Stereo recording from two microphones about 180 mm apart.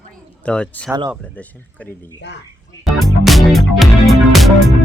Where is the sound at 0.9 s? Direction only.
10° right (ahead or behind).